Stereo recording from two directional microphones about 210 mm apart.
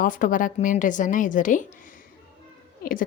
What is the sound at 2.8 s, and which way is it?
Speech, 40° left (ahead or behind).